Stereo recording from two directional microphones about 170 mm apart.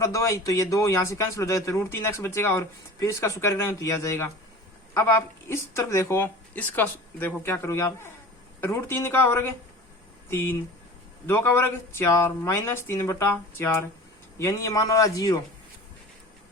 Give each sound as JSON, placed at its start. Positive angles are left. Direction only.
{"t": 0.0, "sound": "a man's voice", "side_deg": 15}